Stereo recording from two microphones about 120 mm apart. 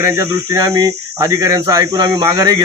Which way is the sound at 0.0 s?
30° right (ahead or behind).